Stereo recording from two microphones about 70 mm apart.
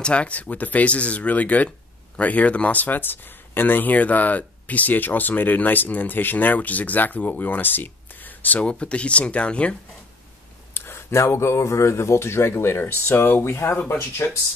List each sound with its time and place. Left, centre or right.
0.0 s speech: centre
10.7 s speech: left